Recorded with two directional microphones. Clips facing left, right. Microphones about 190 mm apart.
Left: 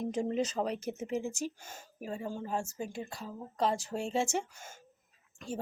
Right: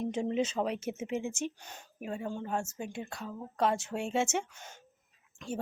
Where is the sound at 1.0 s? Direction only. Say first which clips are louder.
Even; 35° left (ahead or behind).